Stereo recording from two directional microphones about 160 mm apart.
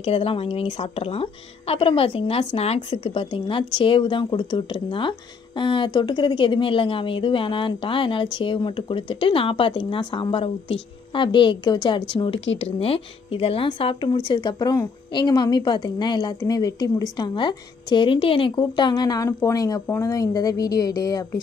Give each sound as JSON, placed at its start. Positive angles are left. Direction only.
{"t": 0.0, "sound": "speech", "side_deg": 35}